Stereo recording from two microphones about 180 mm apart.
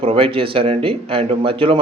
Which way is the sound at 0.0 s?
30° right (ahead or behind).